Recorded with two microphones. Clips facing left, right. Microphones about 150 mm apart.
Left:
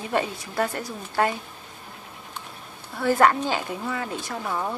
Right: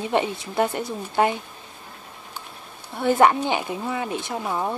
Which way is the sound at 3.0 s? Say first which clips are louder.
Right 2 dB; 20° right (ahead or behind).